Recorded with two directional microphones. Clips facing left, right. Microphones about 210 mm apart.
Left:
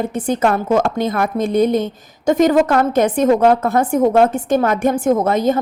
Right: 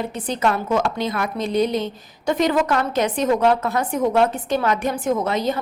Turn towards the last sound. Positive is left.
turn(degrees=50)  # may be behind; listen again after turning